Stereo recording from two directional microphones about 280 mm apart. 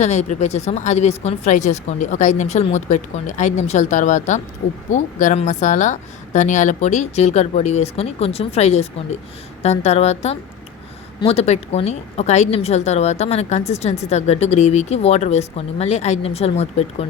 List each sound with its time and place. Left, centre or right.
0.0 s a woman's voice: left